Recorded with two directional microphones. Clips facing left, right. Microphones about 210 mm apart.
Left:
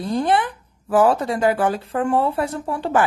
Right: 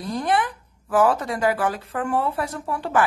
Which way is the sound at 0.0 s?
30° left (ahead or behind).